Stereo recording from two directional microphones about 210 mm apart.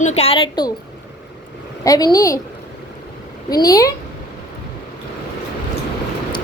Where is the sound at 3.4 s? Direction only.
15° left (ahead or behind).